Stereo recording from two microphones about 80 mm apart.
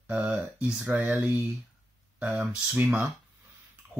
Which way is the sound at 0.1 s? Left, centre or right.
Centre.